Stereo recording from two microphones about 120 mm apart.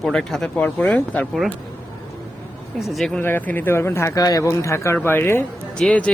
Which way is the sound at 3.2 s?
15° left (ahead or behind).